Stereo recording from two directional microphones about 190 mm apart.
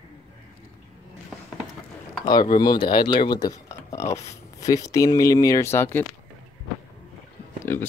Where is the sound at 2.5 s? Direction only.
25° left (ahead or behind).